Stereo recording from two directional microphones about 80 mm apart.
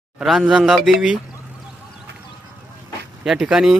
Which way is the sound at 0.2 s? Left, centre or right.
Centre.